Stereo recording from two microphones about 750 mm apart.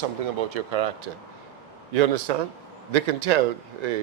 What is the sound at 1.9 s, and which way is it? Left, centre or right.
A man's voice, right.